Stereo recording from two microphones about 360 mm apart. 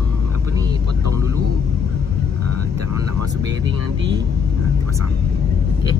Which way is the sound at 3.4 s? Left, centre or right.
Right.